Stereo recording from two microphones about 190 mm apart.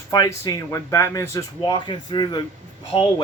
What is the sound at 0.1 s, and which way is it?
A man's voice, 20° left (ahead or behind).